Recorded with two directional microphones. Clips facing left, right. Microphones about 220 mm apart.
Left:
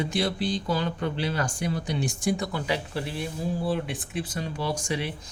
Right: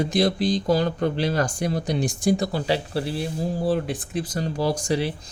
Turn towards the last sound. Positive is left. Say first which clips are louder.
# right 6 dB
turn(degrees=-35)  # may be behind; listen again after turning